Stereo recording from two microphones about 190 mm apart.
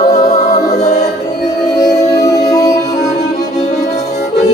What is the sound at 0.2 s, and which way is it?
Music, 35° left (ahead or behind).